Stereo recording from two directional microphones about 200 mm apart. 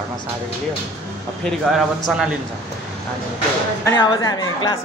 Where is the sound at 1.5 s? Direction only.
Centre (ahead or behind).